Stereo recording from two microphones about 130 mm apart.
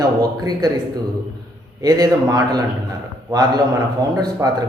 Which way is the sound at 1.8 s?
30° right (ahead or behind).